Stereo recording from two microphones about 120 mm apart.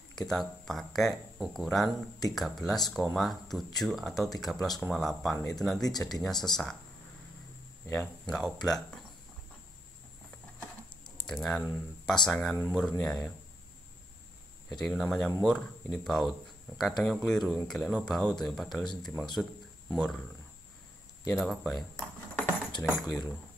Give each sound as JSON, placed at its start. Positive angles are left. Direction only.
{"t": 0.3, "sound": "speech", "side_deg": 5}
{"t": 8.3, "sound": "speech", "side_deg": 5}
{"t": 11.1, "sound": "speech", "side_deg": 5}
{"t": 14.8, "sound": "speech", "side_deg": 5}
{"t": 21.3, "sound": "speech", "side_deg": 0}
{"t": 21.9, "sound": "dishes", "side_deg": 20}
{"t": 23.0, "sound": "speech", "side_deg": 5}